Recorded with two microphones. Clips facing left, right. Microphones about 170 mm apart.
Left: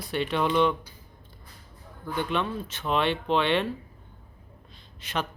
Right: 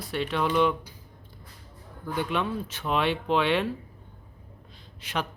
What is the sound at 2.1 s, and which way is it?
Speech, 10° right (ahead or behind).